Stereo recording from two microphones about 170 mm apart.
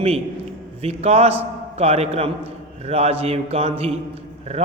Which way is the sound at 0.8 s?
35° right (ahead or behind).